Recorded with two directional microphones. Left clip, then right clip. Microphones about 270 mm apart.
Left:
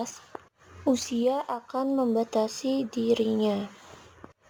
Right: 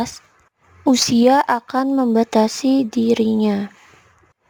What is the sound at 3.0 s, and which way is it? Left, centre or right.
Speech, right.